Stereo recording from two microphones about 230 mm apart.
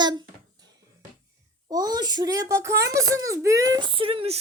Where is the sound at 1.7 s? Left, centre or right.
Centre.